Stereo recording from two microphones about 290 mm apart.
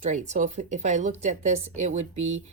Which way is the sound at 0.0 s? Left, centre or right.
Right.